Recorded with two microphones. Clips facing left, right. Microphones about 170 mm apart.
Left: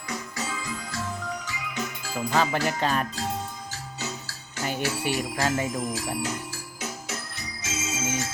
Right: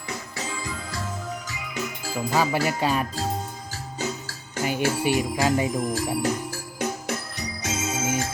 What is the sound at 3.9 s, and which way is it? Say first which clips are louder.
Music: right 7 dB; 50° right (ahead or behind).